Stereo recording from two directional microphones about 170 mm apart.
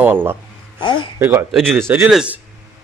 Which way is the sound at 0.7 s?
30° left (ahead or behind).